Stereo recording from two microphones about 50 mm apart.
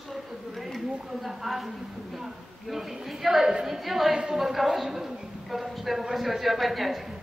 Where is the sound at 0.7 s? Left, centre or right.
Centre.